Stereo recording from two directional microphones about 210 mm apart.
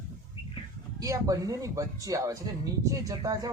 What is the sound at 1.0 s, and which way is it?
Speech, 15° right (ahead or behind).